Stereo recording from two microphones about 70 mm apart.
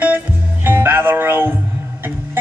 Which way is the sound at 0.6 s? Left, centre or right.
Right.